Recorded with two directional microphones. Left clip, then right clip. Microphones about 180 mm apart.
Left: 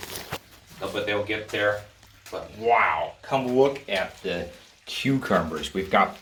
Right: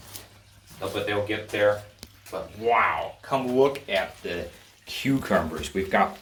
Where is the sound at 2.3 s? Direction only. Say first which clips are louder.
Left 1 dB; 15° left (ahead or behind).